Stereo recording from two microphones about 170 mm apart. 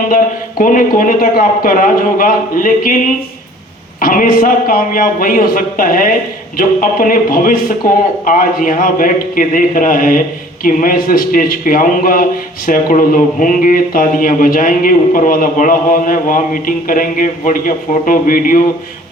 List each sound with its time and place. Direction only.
0.6 s a man's voice: 50° left (ahead or behind)
4.0 s a man's voice: 55° left (ahead or behind)